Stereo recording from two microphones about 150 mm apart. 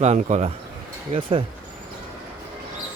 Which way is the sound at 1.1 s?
35° right (ahead or behind).